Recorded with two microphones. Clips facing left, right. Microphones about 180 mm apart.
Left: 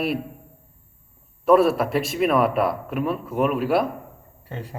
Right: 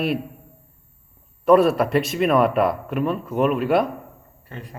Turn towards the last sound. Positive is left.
turn(degrees=5)  # may be behind; listen again after turning